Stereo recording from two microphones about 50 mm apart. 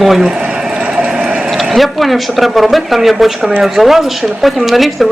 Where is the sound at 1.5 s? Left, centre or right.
Centre.